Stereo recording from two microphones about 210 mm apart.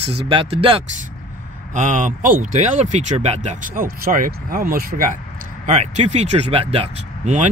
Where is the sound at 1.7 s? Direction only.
35° right (ahead or behind).